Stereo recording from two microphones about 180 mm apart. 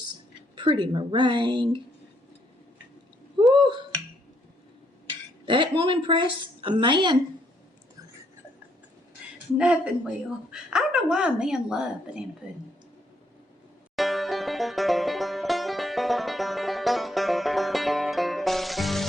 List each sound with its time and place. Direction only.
0.5 s a woman's voice: 25° right (ahead or behind)
3.5 s a woman's voice: 25° right (ahead or behind)
5.5 s a woman's voice: 25° right (ahead or behind)
9.6 s a woman's voice: 5° right (ahead or behind)
13.9 s banjo: centre (ahead or behind)